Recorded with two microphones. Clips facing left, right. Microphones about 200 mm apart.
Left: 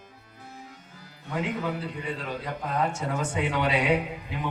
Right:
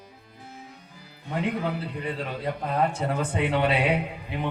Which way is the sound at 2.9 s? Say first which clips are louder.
Right 2 dB; 60° right (ahead or behind).